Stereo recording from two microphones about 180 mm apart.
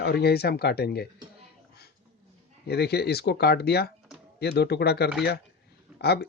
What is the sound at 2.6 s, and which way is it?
Speech, 65° left (ahead or behind).